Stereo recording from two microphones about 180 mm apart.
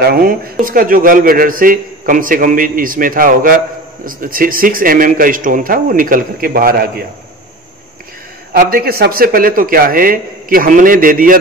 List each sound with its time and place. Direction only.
0.0 s a man's voice: 55° right (ahead or behind)
8.5 s a man's voice: 55° right (ahead or behind)